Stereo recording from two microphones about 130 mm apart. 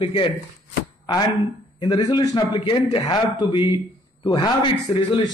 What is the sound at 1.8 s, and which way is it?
A man's voice, 35° left (ahead or behind).